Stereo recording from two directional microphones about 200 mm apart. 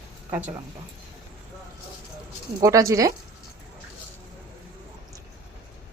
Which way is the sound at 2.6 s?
15° right (ahead or behind).